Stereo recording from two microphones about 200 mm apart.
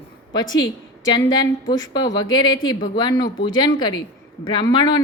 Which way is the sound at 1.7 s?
20° left (ahead or behind).